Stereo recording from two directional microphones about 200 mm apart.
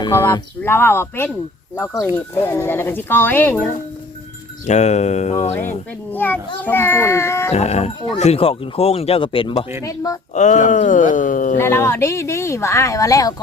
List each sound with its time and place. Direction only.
0.0 s speech: 10° left (ahead or behind)
4.6 s speech: 35° left (ahead or behind)
6.1 s speech: 10° left (ahead or behind)
7.5 s speech: 30° left (ahead or behind); by 10.2 s 15° left (ahead or behind)
10.3 s speech: 35° left (ahead or behind)
11.5 s speech: 15° left (ahead or behind)